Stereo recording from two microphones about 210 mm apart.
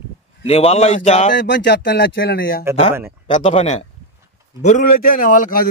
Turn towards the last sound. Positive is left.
turn(degrees=40)  # may be behind; listen again after turning